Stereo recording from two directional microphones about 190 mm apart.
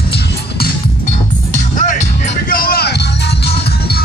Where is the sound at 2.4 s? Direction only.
50° left (ahead or behind).